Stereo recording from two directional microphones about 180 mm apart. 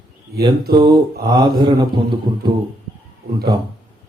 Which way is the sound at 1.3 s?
25° right (ahead or behind).